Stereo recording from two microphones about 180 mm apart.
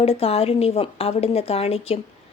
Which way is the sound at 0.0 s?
35° left (ahead or behind).